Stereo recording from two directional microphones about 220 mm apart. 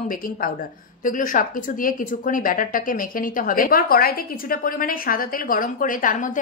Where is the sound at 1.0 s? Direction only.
35° left (ahead or behind).